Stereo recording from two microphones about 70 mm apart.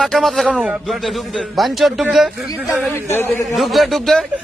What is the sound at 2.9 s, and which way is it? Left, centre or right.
Speech, left.